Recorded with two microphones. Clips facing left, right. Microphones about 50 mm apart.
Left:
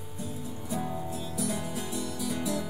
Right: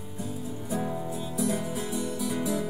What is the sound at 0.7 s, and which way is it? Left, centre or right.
Music, centre.